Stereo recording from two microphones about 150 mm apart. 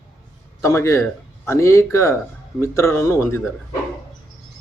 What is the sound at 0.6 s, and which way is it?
Speech, 20° left (ahead or behind).